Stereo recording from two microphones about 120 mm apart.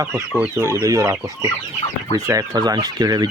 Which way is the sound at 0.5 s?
20° right (ahead or behind).